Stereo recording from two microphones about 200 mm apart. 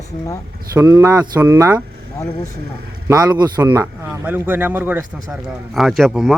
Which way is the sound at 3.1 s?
20° right (ahead or behind).